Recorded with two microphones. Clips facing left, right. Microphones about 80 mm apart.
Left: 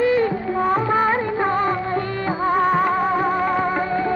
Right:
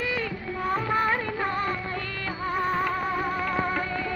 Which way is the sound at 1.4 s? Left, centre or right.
Left.